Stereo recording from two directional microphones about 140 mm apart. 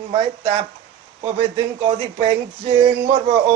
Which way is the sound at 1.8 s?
40° right (ahead or behind).